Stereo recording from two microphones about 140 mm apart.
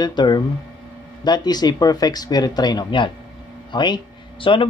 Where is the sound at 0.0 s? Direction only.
30° left (ahead or behind).